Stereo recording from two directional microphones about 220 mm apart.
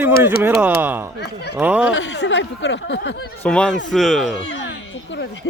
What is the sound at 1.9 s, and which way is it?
Speech, 55° left (ahead or behind).